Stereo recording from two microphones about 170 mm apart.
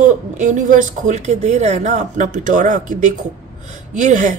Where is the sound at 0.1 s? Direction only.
45° right (ahead or behind).